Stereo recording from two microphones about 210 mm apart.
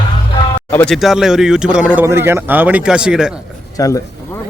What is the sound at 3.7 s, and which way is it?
Speech, 15° left (ahead or behind).